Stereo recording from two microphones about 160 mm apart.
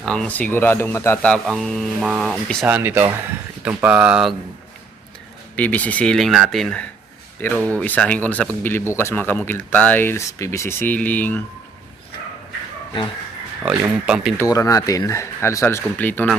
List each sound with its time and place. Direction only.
0.0 s a man's voice: 5° left (ahead or behind)
2.6 s speech: 10° right (ahead or behind)
5.5 s a man's voice: 10° left (ahead or behind)
13.6 s speech: 5° right (ahead or behind)
14.3 s speech: 20° left (ahead or behind)